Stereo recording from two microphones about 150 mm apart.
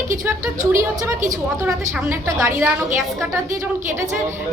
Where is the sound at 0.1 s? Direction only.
20° right (ahead or behind).